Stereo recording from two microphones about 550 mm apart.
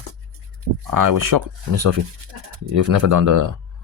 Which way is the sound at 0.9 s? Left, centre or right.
Right.